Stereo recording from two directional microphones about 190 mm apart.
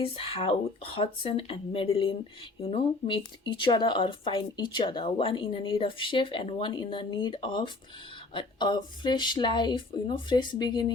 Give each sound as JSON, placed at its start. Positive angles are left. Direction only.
{"t": 0.0, "sound": "speech", "side_deg": 30}